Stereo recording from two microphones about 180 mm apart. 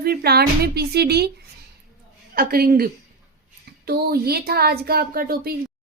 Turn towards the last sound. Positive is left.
turn(degrees=-55)  # may be behind; listen again after turning